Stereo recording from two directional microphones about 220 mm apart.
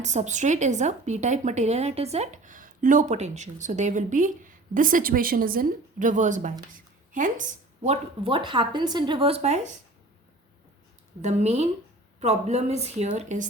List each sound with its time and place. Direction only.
0.0 s speech: 30° right (ahead or behind)
11.2 s a woman's voice: 30° right (ahead or behind)